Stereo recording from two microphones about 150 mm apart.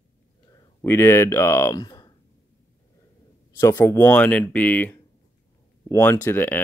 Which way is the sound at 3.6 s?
20° left (ahead or behind).